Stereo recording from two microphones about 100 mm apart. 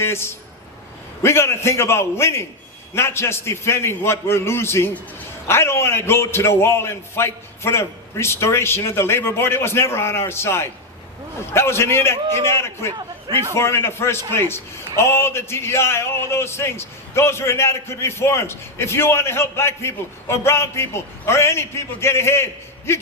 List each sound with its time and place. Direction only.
0.0 s a man's voice: 25° left (ahead or behind)